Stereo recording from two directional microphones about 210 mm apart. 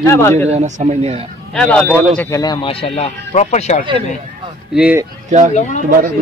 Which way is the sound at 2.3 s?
20° left (ahead or behind).